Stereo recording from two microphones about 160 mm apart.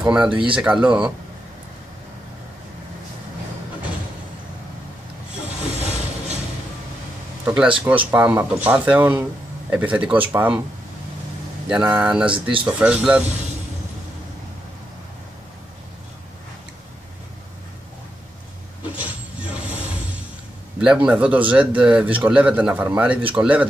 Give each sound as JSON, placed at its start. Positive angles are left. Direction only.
{"t": 0.0, "sound": "speech", "side_deg": -10}
{"t": 5.8, "sound": "vehicle", "side_deg": -45}
{"t": 7.4, "sound": "speech", "side_deg": -10}
{"t": 11.7, "sound": "speech", "side_deg": -10}
{"t": 13.2, "sound": "speech", "side_deg": -45}
{"t": 18.9, "sound": "a sound", "side_deg": -10}
{"t": 20.8, "sound": "speech", "side_deg": -5}